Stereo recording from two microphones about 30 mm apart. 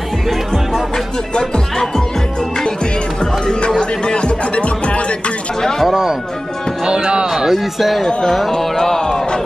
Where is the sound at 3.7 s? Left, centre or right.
Left.